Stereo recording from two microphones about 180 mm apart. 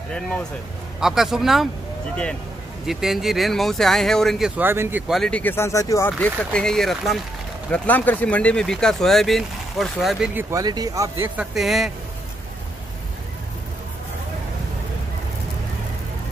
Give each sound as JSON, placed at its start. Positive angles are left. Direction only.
{"t": 0.1, "sound": "speech", "side_deg": 5}
{"t": 2.9, "sound": "speech", "side_deg": 0}
{"t": 4.6, "sound": "speech", "side_deg": -10}
{"t": 10.5, "sound": "speech", "side_deg": -20}
{"t": 11.3, "sound": "speech", "side_deg": 0}